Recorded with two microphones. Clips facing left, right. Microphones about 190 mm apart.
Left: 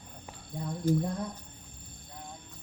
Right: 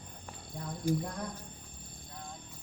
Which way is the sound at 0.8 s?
10° right (ahead or behind).